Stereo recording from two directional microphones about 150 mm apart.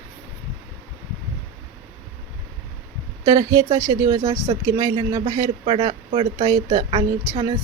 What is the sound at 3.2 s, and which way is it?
Speech, 25° right (ahead or behind).